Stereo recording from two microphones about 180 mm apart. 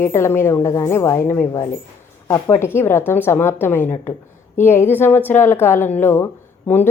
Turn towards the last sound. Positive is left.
turn(degrees=15)  # may be behind; listen again after turning